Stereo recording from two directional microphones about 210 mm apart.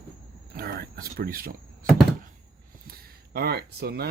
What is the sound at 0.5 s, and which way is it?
Thunk, 45° right (ahead or behind).